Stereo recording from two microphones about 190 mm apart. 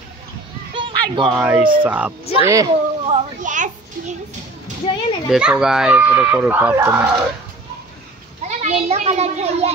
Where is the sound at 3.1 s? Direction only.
40° right (ahead or behind).